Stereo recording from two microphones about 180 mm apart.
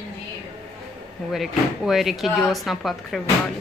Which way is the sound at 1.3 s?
Centre (ahead or behind).